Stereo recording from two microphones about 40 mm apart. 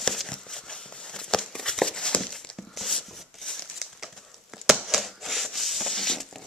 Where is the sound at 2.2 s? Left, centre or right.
Centre.